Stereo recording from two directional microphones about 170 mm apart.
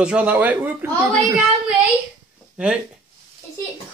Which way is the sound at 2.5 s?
5° right (ahead or behind).